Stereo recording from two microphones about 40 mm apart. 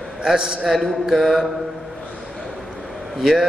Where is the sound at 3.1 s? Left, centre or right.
Centre.